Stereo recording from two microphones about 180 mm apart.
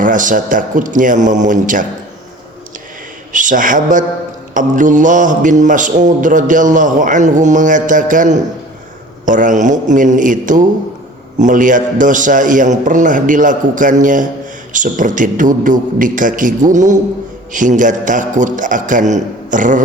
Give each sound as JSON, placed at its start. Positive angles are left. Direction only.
{"t": 0.0, "sound": "a man's voice", "side_deg": -45}
{"t": 3.3, "sound": "a man's voice", "side_deg": -45}